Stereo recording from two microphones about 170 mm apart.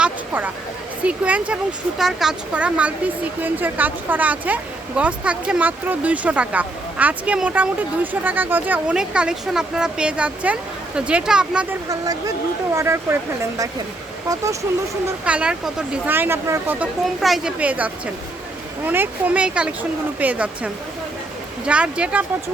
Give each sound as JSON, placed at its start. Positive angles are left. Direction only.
{"t": 0.0, "sound": "a sound", "side_deg": -10}
{"t": 1.0, "sound": "speech", "side_deg": -5}
{"t": 12.7, "sound": "speech", "side_deg": -15}
{"t": 15.2, "sound": "speech", "side_deg": -5}
{"t": 17.2, "sound": "speech", "side_deg": 0}
{"t": 21.7, "sound": "speech", "side_deg": -5}